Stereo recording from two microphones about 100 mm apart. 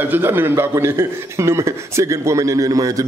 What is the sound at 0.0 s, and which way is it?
A man's voice, 20° right (ahead or behind).